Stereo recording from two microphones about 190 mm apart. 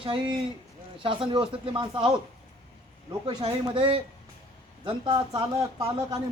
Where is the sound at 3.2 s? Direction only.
25° right (ahead or behind).